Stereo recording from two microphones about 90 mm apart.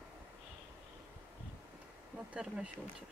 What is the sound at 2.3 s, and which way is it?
Speech, 10° right (ahead or behind).